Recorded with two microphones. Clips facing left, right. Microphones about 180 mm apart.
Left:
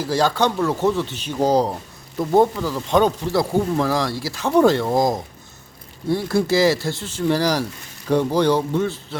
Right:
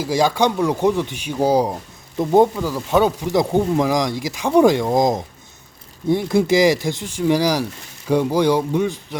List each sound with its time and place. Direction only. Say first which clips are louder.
0.0 s speech: right 2 dB; 10° right (ahead or behind)